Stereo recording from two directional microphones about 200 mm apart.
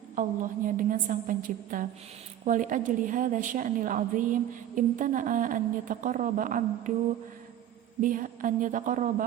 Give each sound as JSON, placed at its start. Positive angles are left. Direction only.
{"t": 0.2, "sound": "a woman's voice", "side_deg": -40}
{"t": 8.0, "sound": "a woman's voice", "side_deg": -40}